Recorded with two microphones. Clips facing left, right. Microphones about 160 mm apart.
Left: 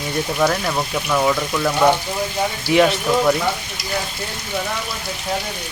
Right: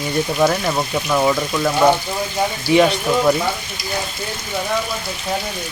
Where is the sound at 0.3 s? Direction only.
10° right (ahead or behind).